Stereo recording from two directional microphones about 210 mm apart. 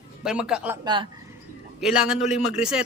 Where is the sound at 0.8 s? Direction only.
20° right (ahead or behind).